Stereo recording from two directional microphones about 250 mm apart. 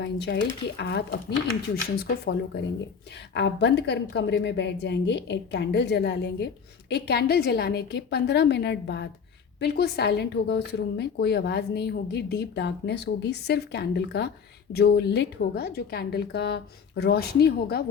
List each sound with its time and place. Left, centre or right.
0.0 s speech: left
3.3 s a woman's voice: left